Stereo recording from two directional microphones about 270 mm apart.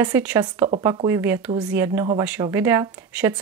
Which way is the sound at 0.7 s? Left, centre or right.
Centre.